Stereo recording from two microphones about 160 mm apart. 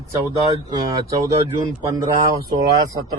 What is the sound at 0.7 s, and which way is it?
Speech, 25° right (ahead or behind).